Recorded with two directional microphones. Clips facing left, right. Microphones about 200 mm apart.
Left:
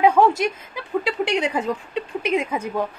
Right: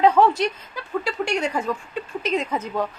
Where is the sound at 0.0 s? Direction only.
10° left (ahead or behind).